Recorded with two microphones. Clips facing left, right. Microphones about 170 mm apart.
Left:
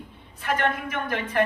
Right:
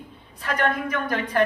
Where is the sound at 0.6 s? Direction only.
40° right (ahead or behind).